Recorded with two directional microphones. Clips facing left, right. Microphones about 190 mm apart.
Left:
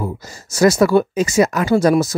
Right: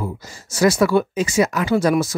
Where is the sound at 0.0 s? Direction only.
45° left (ahead or behind).